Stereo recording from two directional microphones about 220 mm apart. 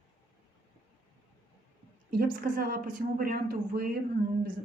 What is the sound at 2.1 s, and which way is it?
Speech, 40° right (ahead or behind).